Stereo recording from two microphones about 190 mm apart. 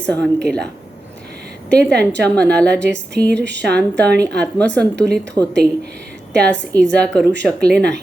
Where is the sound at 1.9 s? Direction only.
60° right (ahead or behind).